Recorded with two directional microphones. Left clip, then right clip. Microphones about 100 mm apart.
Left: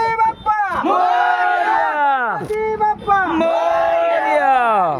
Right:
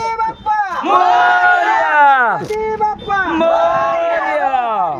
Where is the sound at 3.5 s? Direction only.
15° left (ahead or behind).